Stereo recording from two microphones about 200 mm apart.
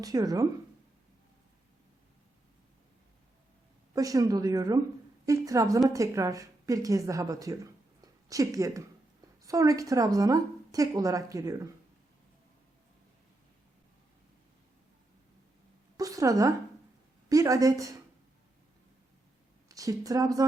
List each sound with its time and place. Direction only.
0.0 s a woman's voice: 20° right (ahead or behind)
3.9 s a woman's voice: 15° right (ahead or behind)
16.0 s a woman's voice: 15° right (ahead or behind)
19.6 s speech: 15° right (ahead or behind)